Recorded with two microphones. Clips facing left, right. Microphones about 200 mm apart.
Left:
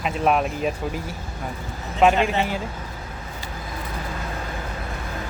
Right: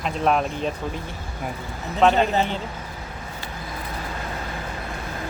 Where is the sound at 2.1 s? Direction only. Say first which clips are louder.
Right 1 dB; 35° right (ahead or behind).